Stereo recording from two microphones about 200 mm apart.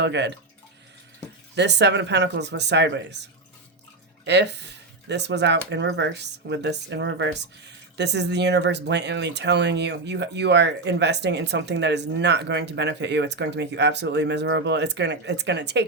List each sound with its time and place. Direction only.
0.0 s speech: 60° right (ahead or behind)
1.5 s speech: 60° right (ahead or behind)
4.3 s speech: 60° right (ahead or behind)